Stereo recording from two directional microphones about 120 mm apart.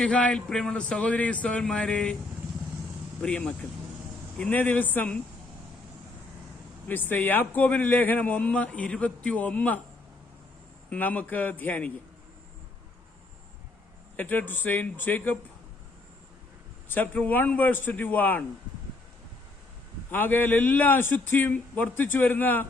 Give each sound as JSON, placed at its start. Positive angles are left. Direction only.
{"t": 0.0, "sound": "a man's voice", "side_deg": 10}
{"t": 3.2, "sound": "a man's voice", "side_deg": 10}
{"t": 6.8, "sound": "a man's voice", "side_deg": 15}
{"t": 10.8, "sound": "a man's voice", "side_deg": 10}
{"t": 14.2, "sound": "a man's voice", "side_deg": 15}
{"t": 16.9, "sound": "a man's voice", "side_deg": 15}
{"t": 20.1, "sound": "a man's voice", "side_deg": 15}